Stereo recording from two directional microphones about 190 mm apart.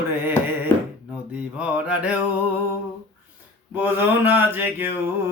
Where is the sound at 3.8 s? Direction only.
10° right (ahead or behind).